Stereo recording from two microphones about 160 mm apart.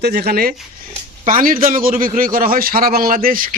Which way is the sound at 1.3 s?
60° right (ahead or behind).